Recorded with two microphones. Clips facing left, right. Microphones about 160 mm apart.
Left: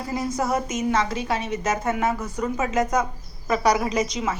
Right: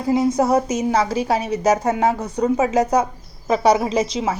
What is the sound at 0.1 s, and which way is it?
A woman's voice, 25° right (ahead or behind).